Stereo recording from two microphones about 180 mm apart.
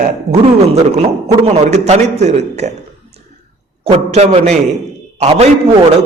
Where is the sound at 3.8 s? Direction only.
35° right (ahead or behind).